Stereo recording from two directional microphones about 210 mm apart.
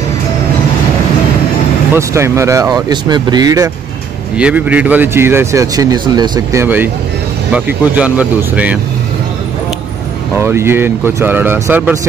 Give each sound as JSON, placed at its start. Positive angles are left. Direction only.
{"t": 2.0, "sound": "speech", "side_deg": -15}
{"t": 4.4, "sound": "speech", "side_deg": -5}
{"t": 10.3, "sound": "speech", "side_deg": -10}